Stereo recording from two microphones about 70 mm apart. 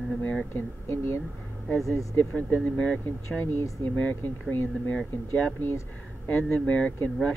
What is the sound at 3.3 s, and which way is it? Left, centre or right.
Speech, left.